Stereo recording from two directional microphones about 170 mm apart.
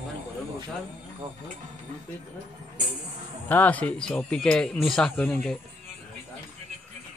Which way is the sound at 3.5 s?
10° left (ahead or behind).